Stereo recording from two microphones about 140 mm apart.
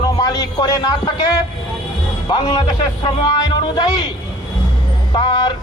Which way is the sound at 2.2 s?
30° left (ahead or behind).